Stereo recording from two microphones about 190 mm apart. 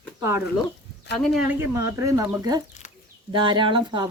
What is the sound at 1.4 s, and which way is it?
Speech, 15° right (ahead or behind).